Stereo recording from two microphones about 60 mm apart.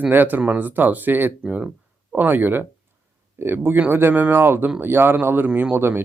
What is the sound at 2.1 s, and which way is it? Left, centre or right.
Speech, right.